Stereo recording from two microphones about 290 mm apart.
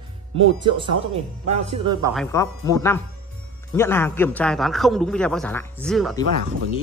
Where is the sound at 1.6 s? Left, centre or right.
Centre.